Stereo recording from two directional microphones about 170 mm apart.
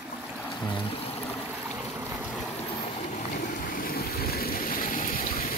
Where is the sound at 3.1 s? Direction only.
45° left (ahead or behind).